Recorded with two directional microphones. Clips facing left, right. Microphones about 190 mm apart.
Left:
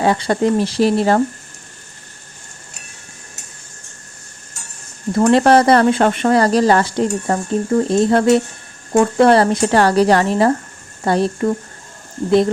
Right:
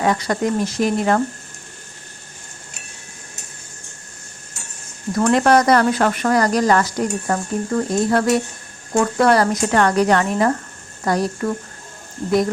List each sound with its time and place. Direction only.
0.0 s speech: 30° left (ahead or behind)
5.1 s speech: 30° left (ahead or behind)